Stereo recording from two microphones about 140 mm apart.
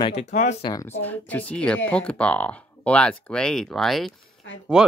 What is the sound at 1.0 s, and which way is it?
Speech, 10° left (ahead or behind).